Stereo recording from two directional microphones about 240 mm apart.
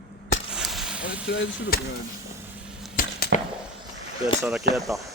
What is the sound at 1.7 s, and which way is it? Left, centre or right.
Speech, left.